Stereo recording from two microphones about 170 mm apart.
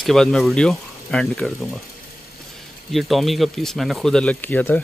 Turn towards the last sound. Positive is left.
turn(degrees=10)  # may be behind; listen again after turning